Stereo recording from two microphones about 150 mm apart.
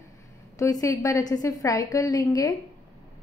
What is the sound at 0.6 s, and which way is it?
A woman's voice, 20° left (ahead or behind).